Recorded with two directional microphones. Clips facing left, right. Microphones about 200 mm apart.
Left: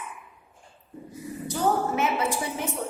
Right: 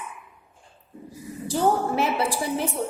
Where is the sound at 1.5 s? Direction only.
35° right (ahead or behind).